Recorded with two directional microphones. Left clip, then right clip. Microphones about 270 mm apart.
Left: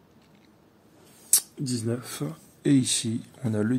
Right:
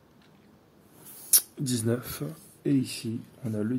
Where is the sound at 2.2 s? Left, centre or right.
Left.